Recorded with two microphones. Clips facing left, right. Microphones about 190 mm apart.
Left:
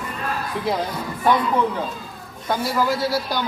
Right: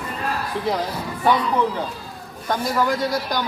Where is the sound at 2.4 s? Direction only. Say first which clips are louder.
Even; 5° left (ahead or behind).